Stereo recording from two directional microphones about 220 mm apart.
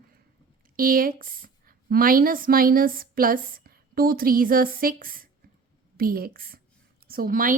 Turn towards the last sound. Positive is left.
turn(degrees=-40)  # may be behind; listen again after turning